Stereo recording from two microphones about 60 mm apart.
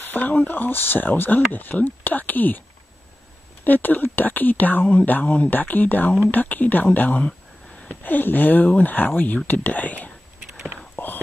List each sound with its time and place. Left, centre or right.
0.0 s speech: left
3.6 s speech: left
11.0 s whispering: left